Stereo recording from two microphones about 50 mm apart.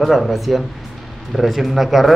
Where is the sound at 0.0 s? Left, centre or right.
Centre.